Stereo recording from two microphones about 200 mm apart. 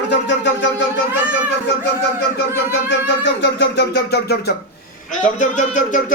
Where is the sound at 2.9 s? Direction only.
60° left (ahead or behind).